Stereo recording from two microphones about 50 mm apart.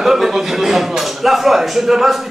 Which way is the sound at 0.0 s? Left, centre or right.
Centre.